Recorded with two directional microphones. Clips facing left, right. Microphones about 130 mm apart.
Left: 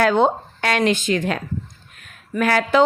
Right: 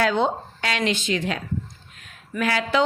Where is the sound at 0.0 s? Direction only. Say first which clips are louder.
Left 5 dB; 50° left (ahead or behind).